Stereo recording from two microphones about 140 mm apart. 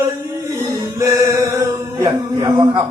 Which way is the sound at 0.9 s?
20° right (ahead or behind).